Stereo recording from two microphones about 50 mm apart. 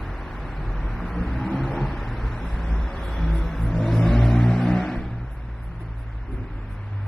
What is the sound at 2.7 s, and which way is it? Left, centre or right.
Vehicle, centre.